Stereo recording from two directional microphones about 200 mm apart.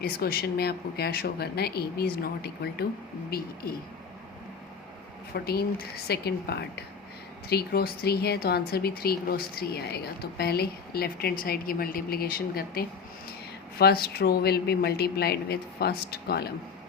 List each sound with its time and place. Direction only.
0.0 s speech: 50° left (ahead or behind)
5.3 s speech: 50° left (ahead or behind)